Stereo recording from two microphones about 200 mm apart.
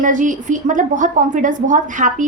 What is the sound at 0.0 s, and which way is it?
A woman's voice, 40° right (ahead or behind).